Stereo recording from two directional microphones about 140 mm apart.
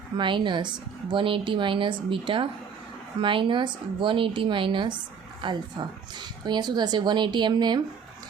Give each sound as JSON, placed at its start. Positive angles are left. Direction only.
{"t": 0.2, "sound": "a woman's voice", "side_deg": -35}